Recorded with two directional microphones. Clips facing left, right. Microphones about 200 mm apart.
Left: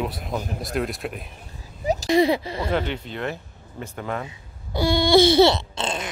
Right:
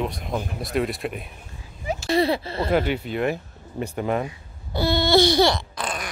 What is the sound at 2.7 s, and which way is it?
Speech, 10° right (ahead or behind).